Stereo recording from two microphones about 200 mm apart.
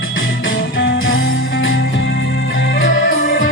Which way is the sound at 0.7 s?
75° left (ahead or behind).